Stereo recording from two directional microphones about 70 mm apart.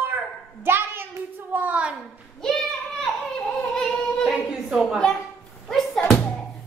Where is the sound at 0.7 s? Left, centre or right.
Right.